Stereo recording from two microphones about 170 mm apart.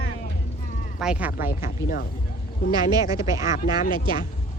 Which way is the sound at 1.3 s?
55° left (ahead or behind).